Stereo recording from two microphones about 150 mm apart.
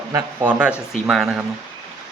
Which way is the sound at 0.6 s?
5° right (ahead or behind).